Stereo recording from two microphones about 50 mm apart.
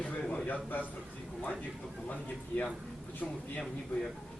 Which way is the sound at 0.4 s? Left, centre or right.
Left.